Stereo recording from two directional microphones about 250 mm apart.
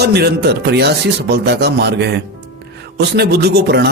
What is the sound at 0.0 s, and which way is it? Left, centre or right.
Speech, right.